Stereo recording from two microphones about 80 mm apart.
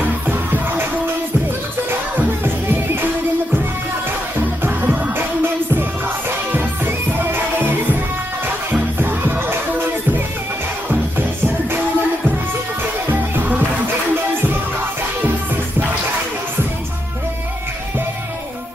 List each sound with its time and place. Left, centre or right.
0.0 s music: right
2.1 s music: right
4.6 s music: right
9.0 s music: right
13.1 s music: right